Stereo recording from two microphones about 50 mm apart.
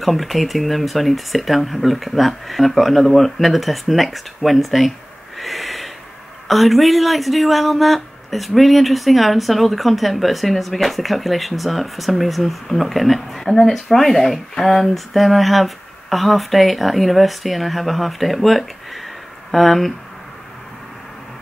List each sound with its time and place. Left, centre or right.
0.0 s speech: centre
5.4 s a sound: centre
6.4 s speech: centre